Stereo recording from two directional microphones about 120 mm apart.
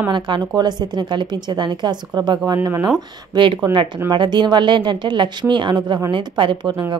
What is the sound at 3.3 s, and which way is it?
A woman's voice, 40° right (ahead or behind).